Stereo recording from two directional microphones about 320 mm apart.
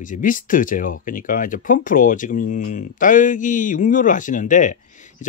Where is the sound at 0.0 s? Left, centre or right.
Left.